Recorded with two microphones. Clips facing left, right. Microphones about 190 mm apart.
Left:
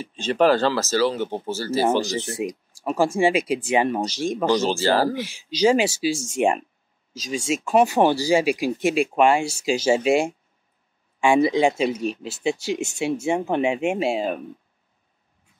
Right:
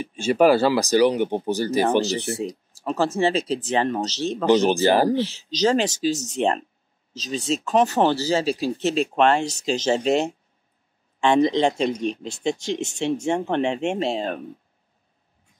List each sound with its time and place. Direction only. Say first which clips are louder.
0.0 s speech: right 2 dB; 10° right (ahead or behind)
2.0 s speech: right 2 dB; 15° left (ahead or behind)
4.5 s speech: right 4 dB; 15° right (ahead or behind)
5.1 s speech: right 6 dB; 10° left (ahead or behind)